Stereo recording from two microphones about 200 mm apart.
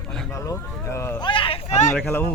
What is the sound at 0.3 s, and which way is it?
Speech, 15° left (ahead or behind).